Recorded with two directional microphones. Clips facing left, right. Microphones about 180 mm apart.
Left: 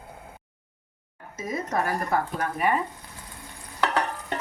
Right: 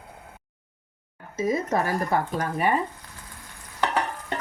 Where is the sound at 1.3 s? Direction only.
30° right (ahead or behind).